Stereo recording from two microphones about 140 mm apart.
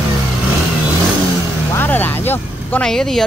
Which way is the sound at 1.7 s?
15° left (ahead or behind).